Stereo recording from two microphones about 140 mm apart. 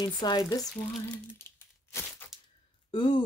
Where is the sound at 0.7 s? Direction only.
5° left (ahead or behind).